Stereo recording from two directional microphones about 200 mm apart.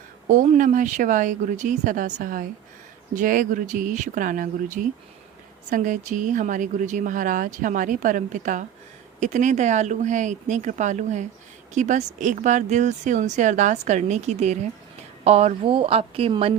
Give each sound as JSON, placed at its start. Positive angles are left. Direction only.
{"t": 0.3, "sound": "a woman's voice", "side_deg": -40}